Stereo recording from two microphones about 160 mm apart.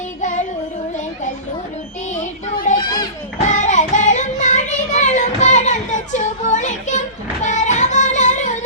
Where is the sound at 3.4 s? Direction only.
50° left (ahead or behind).